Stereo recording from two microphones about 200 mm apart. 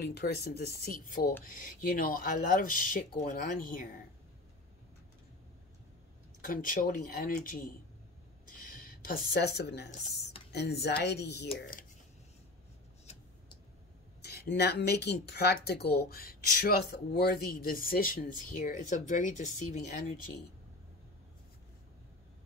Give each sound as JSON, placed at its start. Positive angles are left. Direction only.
{"t": 0.0, "sound": "speech", "side_deg": 55}
{"t": 6.4, "sound": "speech", "side_deg": 45}
{"t": 11.5, "sound": "speech", "side_deg": 45}
{"t": 14.2, "sound": "speech", "side_deg": 55}